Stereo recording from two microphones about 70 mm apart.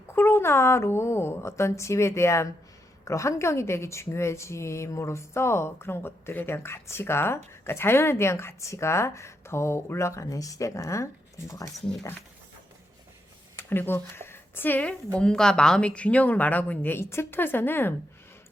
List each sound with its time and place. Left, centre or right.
0.1 s speech: left
10.2 s speech: left
13.6 s speech: left